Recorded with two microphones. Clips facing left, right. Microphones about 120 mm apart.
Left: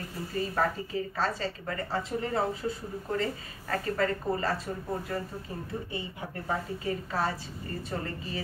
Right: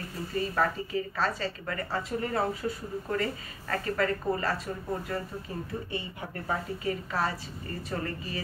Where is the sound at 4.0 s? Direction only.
25° left (ahead or behind).